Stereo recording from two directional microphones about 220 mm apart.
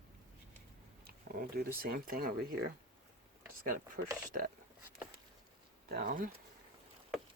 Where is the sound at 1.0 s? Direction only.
45° right (ahead or behind).